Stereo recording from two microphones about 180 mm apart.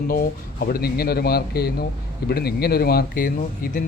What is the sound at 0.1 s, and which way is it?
Speech, 55° left (ahead or behind).